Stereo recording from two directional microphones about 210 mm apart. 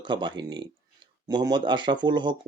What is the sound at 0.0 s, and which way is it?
Speech, 20° right (ahead or behind).